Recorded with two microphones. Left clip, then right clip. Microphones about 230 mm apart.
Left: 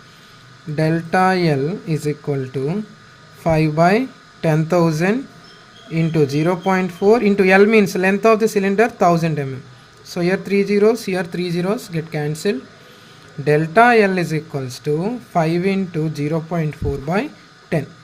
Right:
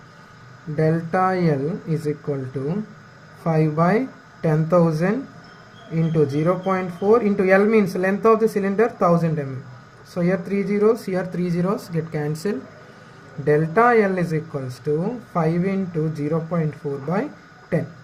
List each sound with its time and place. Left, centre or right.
0.8 s speech: left
13.4 s speech: left